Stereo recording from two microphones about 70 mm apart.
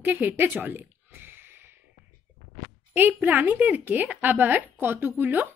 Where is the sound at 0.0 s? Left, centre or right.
Right.